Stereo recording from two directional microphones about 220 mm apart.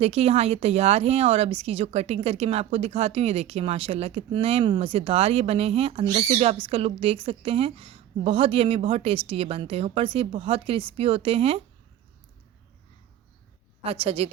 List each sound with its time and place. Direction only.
0.0 s speech: 30° right (ahead or behind)
13.8 s speech: 25° right (ahead or behind)